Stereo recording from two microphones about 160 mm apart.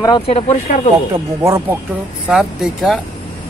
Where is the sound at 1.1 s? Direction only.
20° right (ahead or behind).